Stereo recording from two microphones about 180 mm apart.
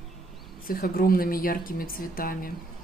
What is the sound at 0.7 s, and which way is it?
A woman's voice, 55° left (ahead or behind).